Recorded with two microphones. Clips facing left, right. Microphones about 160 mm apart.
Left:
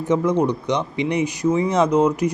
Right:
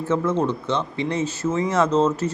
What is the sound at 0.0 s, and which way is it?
Speech, 15° left (ahead or behind).